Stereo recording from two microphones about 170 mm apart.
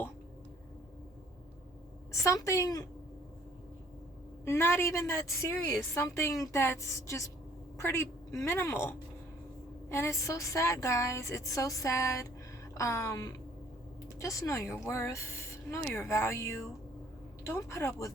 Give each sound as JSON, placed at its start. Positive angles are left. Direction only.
{"t": 2.2, "sound": "a woman's voice", "side_deg": 20}
{"t": 4.4, "sound": "a woman's voice", "side_deg": 15}